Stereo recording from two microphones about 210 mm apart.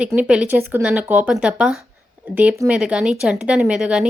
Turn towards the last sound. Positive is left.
turn(degrees=-5)  # may be behind; listen again after turning